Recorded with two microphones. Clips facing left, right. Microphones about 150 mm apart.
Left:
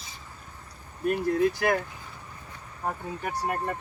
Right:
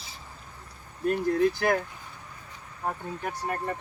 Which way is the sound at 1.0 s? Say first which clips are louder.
Even; 5° left (ahead or behind).